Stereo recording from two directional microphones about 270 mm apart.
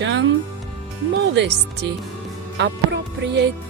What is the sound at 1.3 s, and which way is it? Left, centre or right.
Speech, right.